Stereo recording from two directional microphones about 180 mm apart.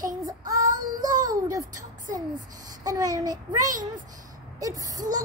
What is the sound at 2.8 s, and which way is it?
Speech, 20° right (ahead or behind).